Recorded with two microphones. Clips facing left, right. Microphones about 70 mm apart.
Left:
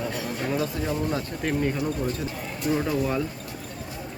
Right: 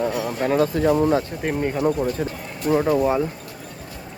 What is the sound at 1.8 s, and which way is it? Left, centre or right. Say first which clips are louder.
Speech: right 6 dB; right.